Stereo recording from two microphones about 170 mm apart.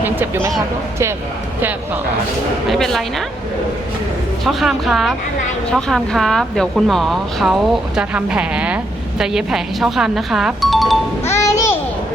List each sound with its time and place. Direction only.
0.0 s speech: 10° right (ahead or behind)
2.6 s speech: centre (ahead or behind)
4.4 s speech: centre (ahead or behind)
11.3 s music: 20° left (ahead or behind)